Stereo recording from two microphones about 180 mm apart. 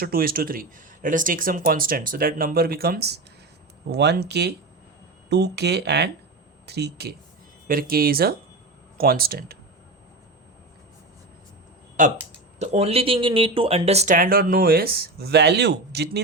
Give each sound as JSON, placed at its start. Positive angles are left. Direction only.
{"t": 0.0, "sound": "speech", "side_deg": -55}
{"t": 7.7, "sound": "speech", "side_deg": -55}
{"t": 12.5, "sound": "speech", "side_deg": -35}